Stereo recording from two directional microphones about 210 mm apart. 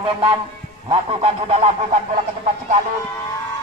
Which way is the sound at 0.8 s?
30° right (ahead or behind).